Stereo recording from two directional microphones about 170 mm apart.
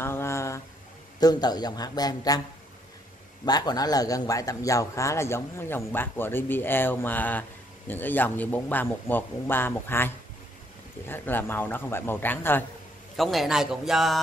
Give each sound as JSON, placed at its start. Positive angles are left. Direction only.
{"t": 0.0, "sound": "a sound", "side_deg": 15}
{"t": 1.2, "sound": "speech", "side_deg": 25}
{"t": 3.4, "sound": "speech", "side_deg": 25}
{"t": 13.1, "sound": "a man's voice", "side_deg": 0}